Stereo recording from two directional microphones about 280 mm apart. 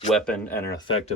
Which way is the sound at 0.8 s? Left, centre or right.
Centre.